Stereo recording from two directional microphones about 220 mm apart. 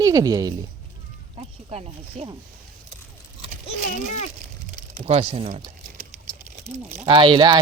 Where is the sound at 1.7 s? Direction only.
30° right (ahead or behind).